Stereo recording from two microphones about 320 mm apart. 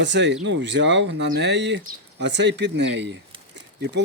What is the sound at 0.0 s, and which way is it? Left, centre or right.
Speech, right.